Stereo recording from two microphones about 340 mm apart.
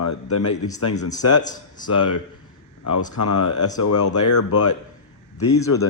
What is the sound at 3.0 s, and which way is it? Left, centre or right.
Speech, left.